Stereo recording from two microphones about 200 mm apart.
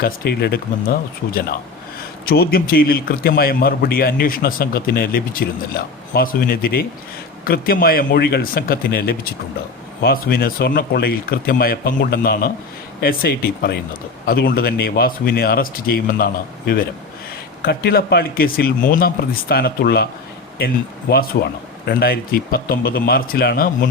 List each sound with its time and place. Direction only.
0.0 s a man's voice: 50° left (ahead or behind)
21.3 s a man's voice: 50° left (ahead or behind)